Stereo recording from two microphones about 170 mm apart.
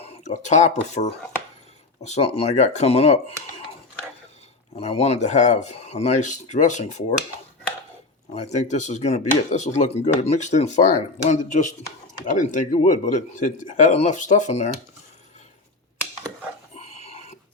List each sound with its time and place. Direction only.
0.0 s speech: 40° left (ahead or behind)
4.8 s speech: 35° left (ahead or behind)
8.5 s speech: 45° left (ahead or behind)
16.7 s a sound: 40° left (ahead or behind)